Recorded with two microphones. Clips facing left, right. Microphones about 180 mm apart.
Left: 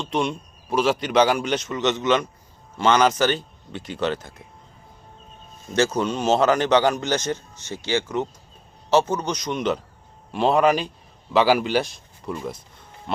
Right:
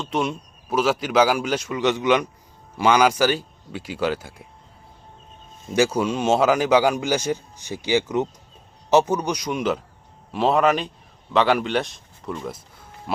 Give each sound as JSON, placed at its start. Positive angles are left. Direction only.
{"t": 0.0, "sound": "a man's voice", "side_deg": -5}
{"t": 5.7, "sound": "a man's voice", "side_deg": -10}